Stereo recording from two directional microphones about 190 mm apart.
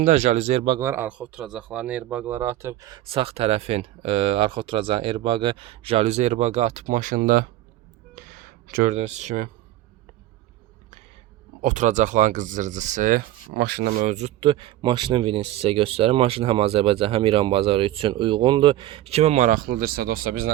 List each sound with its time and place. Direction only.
0.0 s speech: 35° right (ahead or behind)
0.8 s speech: 10° right (ahead or behind); by 7.4 s 50° right (ahead or behind)
8.1 s a sound: 45° right (ahead or behind)
11.6 s speech: 40° right (ahead or behind)
13.5 s speech: 60° right (ahead or behind)
14.1 s speech: 35° right (ahead or behind); by 20.4 s 50° right (ahead or behind)